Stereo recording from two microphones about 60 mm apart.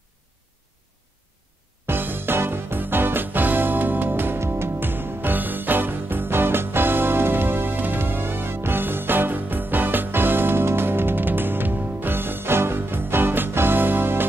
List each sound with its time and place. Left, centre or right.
1.9 s music: right